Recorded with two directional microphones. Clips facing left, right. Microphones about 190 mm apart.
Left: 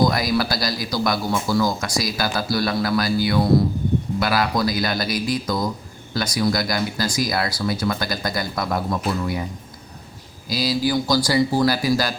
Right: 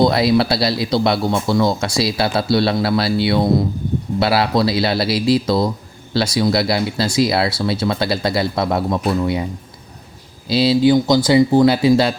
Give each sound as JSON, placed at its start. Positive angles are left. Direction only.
{"t": 0.0, "sound": "speech", "side_deg": -25}
{"t": 10.5, "sound": "speech", "side_deg": -30}